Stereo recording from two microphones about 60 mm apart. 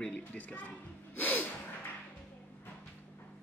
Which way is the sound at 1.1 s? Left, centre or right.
Left.